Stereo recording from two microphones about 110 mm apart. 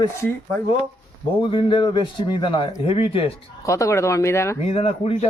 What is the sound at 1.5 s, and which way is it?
A man's voice, 50° left (ahead or behind).